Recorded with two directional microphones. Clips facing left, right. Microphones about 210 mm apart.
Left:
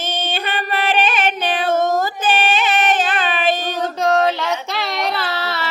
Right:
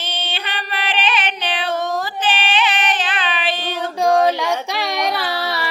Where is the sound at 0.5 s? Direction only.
45° left (ahead or behind).